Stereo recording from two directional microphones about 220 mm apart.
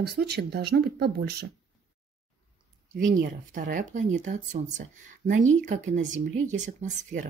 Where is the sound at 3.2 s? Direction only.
35° right (ahead or behind).